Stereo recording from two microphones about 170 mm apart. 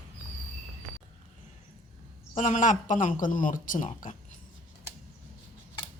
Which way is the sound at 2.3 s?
45° left (ahead or behind).